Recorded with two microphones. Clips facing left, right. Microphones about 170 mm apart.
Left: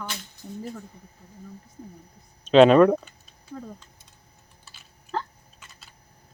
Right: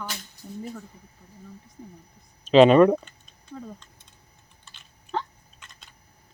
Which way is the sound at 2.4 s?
Centre (ahead or behind).